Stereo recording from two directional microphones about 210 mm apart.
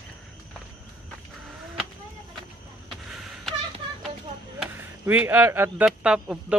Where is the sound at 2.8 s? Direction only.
Centre (ahead or behind).